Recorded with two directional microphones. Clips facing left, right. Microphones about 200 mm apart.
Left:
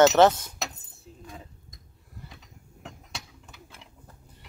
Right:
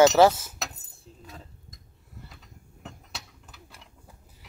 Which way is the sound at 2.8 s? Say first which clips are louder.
Left 1 dB; centre (ahead or behind).